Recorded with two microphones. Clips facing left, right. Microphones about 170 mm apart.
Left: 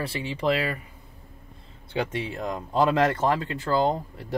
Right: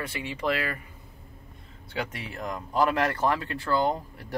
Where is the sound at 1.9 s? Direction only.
25° left (ahead or behind).